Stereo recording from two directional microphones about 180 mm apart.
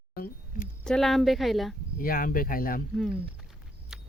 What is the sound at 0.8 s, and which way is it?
Speech, 5° left (ahead or behind).